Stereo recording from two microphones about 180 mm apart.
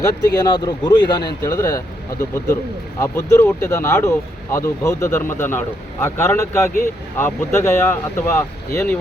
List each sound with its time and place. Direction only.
0.0 s speech: 25° left (ahead or behind)
3.0 s speech: 10° left (ahead or behind)